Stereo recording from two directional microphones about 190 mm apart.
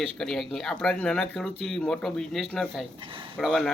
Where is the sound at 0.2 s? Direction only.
Centre (ahead or behind).